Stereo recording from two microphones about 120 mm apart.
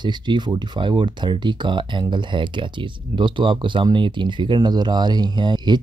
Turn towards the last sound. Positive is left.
turn(degrees=-35)  # may be behind; listen again after turning